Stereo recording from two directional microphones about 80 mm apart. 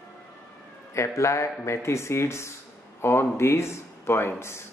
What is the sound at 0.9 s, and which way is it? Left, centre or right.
Speech, left.